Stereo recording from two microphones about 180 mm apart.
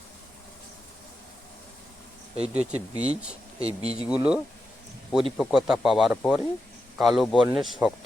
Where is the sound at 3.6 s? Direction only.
35° right (ahead or behind).